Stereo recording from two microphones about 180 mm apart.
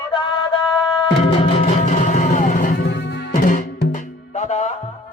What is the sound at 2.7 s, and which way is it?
Music, 65° left (ahead or behind).